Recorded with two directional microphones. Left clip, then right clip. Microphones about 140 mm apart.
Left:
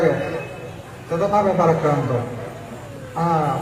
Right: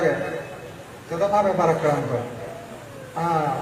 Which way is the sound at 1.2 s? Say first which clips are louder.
Left 2 dB; 35° right (ahead or behind).